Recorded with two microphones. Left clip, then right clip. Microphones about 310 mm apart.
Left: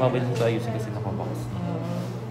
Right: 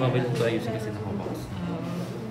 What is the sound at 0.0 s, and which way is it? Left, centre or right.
Speech, centre.